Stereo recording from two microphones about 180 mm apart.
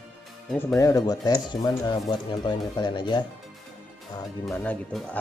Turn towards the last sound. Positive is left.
turn(degrees=10)  # may be behind; listen again after turning